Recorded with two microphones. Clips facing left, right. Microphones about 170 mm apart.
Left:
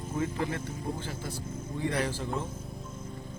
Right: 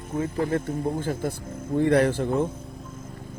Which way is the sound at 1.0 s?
50° right (ahead or behind).